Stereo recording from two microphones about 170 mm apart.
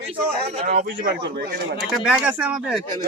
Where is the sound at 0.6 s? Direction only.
55° right (ahead or behind); by 1.5 s 70° right (ahead or behind).